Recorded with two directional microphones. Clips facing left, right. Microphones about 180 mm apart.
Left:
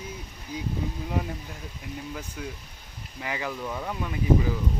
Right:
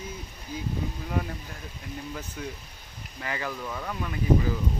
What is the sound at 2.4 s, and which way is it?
Speech, 5° left (ahead or behind).